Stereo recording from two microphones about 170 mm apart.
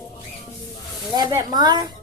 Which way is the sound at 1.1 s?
20° right (ahead or behind).